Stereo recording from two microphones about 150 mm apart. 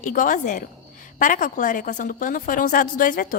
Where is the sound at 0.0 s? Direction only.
60° left (ahead or behind).